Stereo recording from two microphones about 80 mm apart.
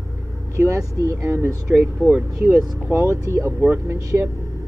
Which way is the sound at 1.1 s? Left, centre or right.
Right.